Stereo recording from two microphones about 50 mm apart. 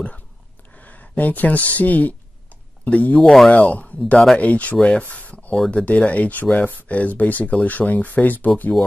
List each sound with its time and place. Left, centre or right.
0.7 s speech: left
3.2 s speech: centre
3.4 s speech: left
4.7 s speech: centre
5.1 s a sound: left
5.7 s speech: left